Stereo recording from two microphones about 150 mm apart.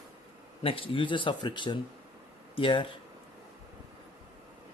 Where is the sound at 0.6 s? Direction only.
35° left (ahead or behind).